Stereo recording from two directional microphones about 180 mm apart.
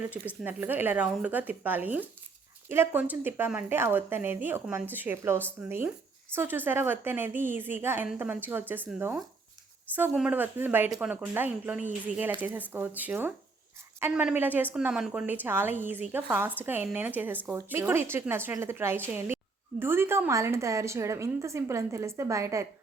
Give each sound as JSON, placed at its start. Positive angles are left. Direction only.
{"t": 0.1, "sound": "a woman's voice", "side_deg": -10}
{"t": 10.1, "sound": "a woman's voice", "side_deg": -5}